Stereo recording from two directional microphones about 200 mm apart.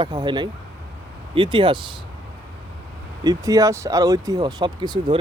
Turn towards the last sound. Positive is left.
turn(degrees=-20)  # may be behind; listen again after turning